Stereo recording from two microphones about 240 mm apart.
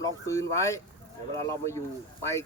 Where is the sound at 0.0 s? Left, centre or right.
Centre.